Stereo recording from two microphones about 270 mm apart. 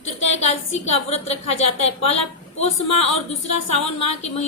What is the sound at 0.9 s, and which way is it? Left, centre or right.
A woman's voice, left.